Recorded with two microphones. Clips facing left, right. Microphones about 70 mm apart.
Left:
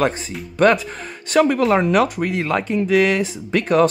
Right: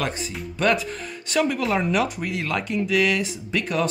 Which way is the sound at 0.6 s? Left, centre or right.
Left.